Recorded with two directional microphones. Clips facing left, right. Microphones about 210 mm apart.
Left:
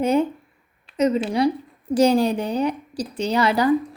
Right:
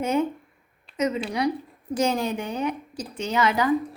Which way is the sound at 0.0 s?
35° left (ahead or behind).